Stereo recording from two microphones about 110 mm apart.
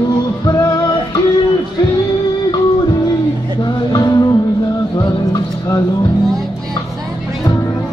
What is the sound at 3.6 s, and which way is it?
Music, 40° left (ahead or behind).